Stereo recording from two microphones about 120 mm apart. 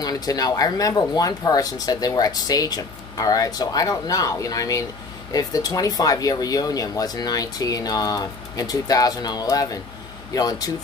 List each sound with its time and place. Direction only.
0.0 s speech: 30° left (ahead or behind)